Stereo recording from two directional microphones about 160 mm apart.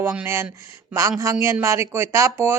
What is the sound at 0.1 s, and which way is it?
Speech, 15° right (ahead or behind).